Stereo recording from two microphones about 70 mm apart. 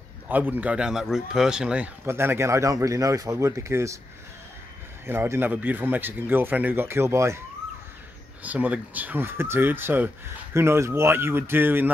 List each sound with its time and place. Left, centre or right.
0.3 s speech: right
2.0 s speech: right
5.0 s speech: right
8.4 s speech: right
10.5 s speech: right